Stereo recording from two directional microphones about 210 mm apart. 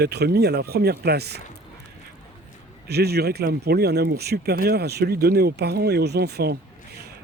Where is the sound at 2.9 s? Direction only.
50° right (ahead or behind).